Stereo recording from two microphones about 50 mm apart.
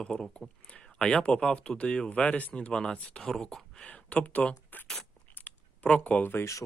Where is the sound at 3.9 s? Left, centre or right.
Left.